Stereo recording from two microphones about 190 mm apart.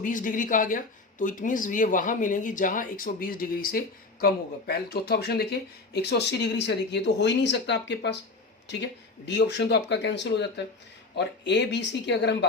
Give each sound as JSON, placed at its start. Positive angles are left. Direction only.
{"t": 0.0, "sound": "speech", "side_deg": 45}
{"t": 9.2, "sound": "speech", "side_deg": 65}